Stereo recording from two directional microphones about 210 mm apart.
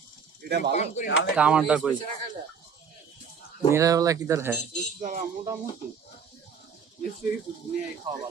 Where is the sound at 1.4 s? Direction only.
5° right (ahead or behind).